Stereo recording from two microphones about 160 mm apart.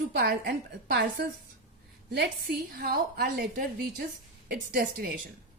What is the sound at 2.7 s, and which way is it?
A woman's voice, 75° right (ahead or behind).